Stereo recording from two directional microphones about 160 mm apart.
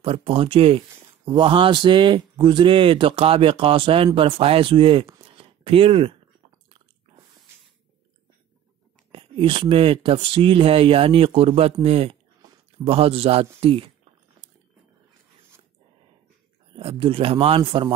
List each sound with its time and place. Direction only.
0.0 s speech: 35° right (ahead or behind)
5.2 s a sound: 35° right (ahead or behind)
9.1 s speech: 35° right (ahead or behind)
16.7 s speech: 35° right (ahead or behind)